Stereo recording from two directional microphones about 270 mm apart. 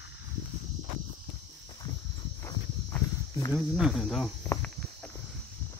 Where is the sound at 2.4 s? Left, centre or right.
Centre.